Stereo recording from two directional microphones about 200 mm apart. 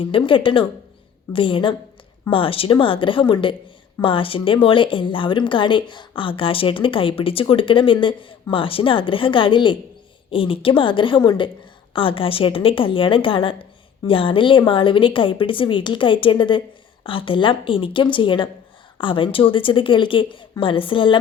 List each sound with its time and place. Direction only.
0.0 s a woman's voice: 25° left (ahead or behind)